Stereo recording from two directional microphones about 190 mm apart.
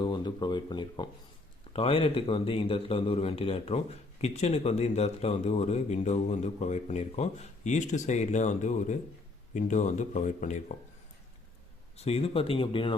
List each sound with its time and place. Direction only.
0.0 s speech: 25° left (ahead or behind); by 10.8 s 40° left (ahead or behind)
11.9 s speech: 30° left (ahead or behind)